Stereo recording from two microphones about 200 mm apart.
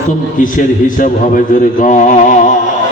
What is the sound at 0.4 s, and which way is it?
A man's voice, 40° left (ahead or behind).